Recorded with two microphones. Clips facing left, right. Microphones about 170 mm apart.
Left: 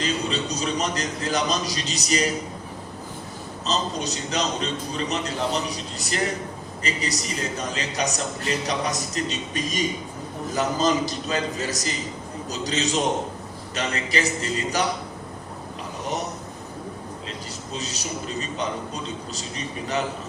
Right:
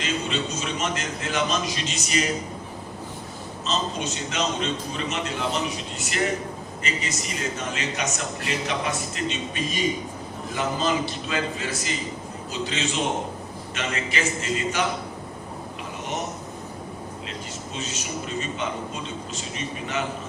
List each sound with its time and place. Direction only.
0.0 s a man's voice: 35° left (ahead or behind)
3.7 s a man's voice: 35° left (ahead or behind)
17.7 s a man's voice: 35° left (ahead or behind)